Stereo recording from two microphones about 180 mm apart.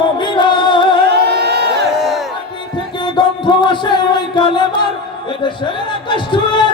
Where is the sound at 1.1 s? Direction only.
65° right (ahead or behind).